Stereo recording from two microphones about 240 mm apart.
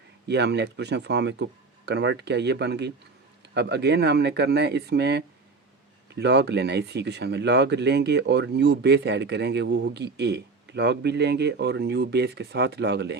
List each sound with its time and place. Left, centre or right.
0.3 s speech: right